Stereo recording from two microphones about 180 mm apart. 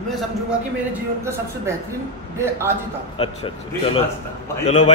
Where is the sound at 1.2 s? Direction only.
15° right (ahead or behind).